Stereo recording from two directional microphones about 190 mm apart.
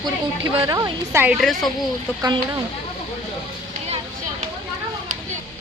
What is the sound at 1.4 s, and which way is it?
Speech, centre (ahead or behind).